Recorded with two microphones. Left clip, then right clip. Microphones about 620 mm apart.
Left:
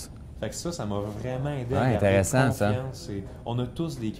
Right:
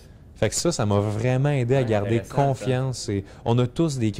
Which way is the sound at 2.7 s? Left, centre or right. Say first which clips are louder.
Right 7 dB; right.